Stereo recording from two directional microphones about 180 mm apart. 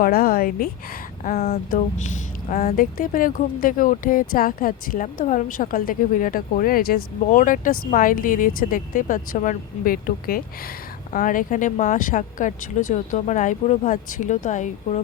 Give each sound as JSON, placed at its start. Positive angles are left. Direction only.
{"t": 0.0, "sound": "a woman's voice", "side_deg": 55}